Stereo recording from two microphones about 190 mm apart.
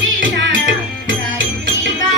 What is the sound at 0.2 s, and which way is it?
Music, 80° right.